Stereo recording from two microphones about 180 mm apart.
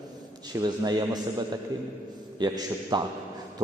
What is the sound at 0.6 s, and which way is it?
Speech, 20° right (ahead or behind).